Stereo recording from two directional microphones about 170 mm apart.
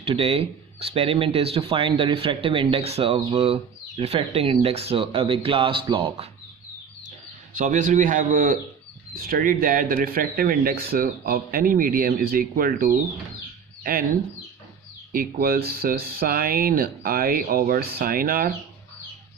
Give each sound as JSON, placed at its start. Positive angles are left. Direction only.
{"t": 0.0, "sound": "speech", "side_deg": -35}
{"t": 7.5, "sound": "a man's voice", "side_deg": -50}
{"t": 15.1, "sound": "speech", "side_deg": -60}